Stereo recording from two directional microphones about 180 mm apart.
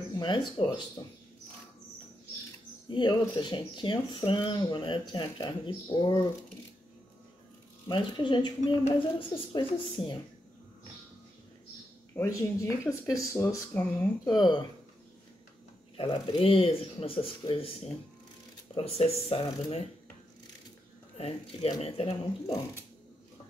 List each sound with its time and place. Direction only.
0.1 s speech: 25° left (ahead or behind)
2.9 s speech: 25° left (ahead or behind)
7.9 s speech: 25° left (ahead or behind)
12.2 s speech: 20° left (ahead or behind)
14.2 s speech: 25° left (ahead or behind)
16.0 s speech: 30° left (ahead or behind)
18.9 s speech: 35° left (ahead or behind)
21.2 s speech: 35° left (ahead or behind)